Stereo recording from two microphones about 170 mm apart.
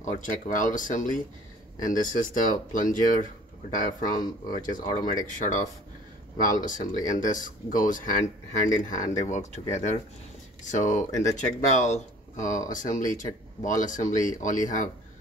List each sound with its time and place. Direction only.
0.0 s speech: 50° left (ahead or behind)